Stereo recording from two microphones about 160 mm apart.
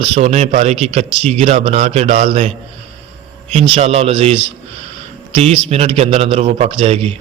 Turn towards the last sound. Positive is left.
turn(degrees=-40)  # may be behind; listen again after turning